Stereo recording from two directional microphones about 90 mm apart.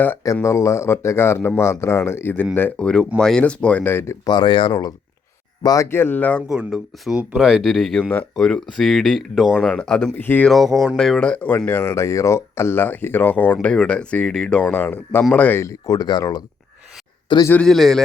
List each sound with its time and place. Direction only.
0.4 s speech: 35° left (ahead or behind)
2.7 s speech: 10° left (ahead or behind); by 4.2 s 30° left (ahead or behind)
4.3 s speech: 60° left (ahead or behind)
5.6 s speech: 40° left (ahead or behind)
5.9 s speech: 25° left (ahead or behind)
6.5 s speech: 5° right (ahead or behind)
9.6 s speech: 10° left (ahead or behind)
10.2 s speech: 20° left (ahead or behind)
10.5 s speech: centre (ahead or behind)
11.9 s speech: 35° left (ahead or behind); by 14.6 s 5° left (ahead or behind)
14.6 s speech: 15° left (ahead or behind)
15.5 s speech: 35° left (ahead or behind)
17.3 s speech: 60° left (ahead or behind)
17.7 s speech: centre (ahead or behind)